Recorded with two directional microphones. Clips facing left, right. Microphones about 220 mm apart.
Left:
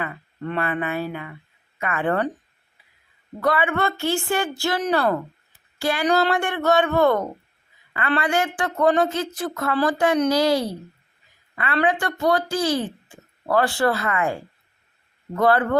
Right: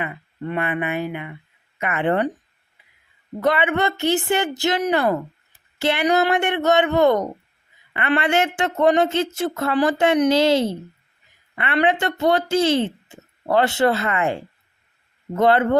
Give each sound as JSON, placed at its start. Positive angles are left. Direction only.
{"t": 0.0, "sound": "speech", "side_deg": -15}
{"t": 3.4, "sound": "a woman's voice", "side_deg": -20}